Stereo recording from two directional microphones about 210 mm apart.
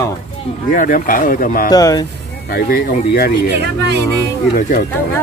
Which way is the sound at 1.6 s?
15° left (ahead or behind).